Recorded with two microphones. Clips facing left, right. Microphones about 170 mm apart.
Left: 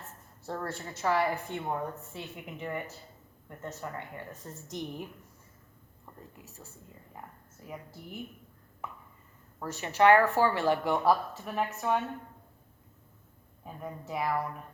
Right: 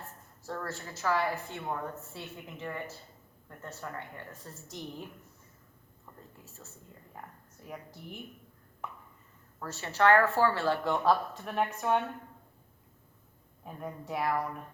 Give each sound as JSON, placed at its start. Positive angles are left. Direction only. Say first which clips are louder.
{"t": 0.4, "sound": "a woman's voice", "louder": "left 2 dB", "side_deg": 25}
{"t": 6.1, "sound": "speech", "louder": "left 3 dB", "side_deg": 15}
{"t": 7.6, "sound": "speech", "louder": "left 1 dB", "side_deg": 5}
{"t": 9.6, "sound": "speech", "louder": "left 3 dB", "side_deg": 15}
{"t": 13.7, "sound": "speech", "louder": "right 1 dB", "side_deg": 0}